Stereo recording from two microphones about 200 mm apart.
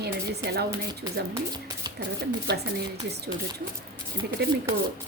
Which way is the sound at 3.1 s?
55° right (ahead or behind).